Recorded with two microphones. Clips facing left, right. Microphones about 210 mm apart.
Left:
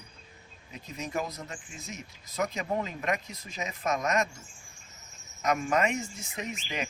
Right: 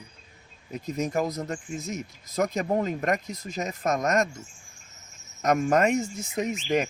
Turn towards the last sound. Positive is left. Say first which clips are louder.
# right 10 dB
turn(degrees=-45)  # may be behind; listen again after turning